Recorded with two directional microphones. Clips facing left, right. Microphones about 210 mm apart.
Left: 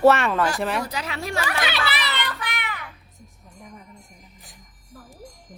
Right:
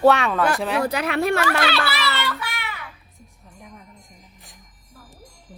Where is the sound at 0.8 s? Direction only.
60° right (ahead or behind).